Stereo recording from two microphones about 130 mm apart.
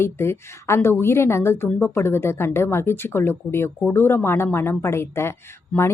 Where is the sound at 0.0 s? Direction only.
20° left (ahead or behind).